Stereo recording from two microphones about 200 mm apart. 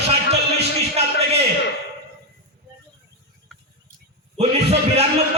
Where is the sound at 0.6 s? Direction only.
30° right (ahead or behind).